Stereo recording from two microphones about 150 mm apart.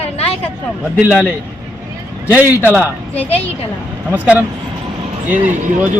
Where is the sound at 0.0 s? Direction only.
40° left (ahead or behind).